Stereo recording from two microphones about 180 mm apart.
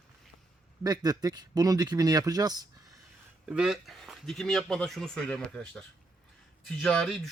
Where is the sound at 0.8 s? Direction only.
20° right (ahead or behind).